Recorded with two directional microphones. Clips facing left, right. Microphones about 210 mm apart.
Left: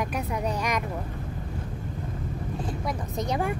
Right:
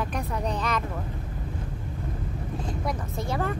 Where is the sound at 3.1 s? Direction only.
20° left (ahead or behind).